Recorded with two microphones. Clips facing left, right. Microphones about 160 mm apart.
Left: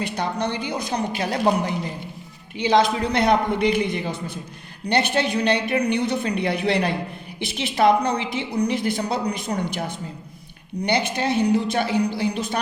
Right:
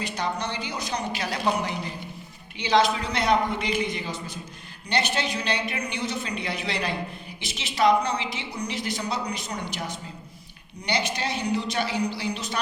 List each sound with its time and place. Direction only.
0.0 s a woman's voice: 55° left (ahead or behind)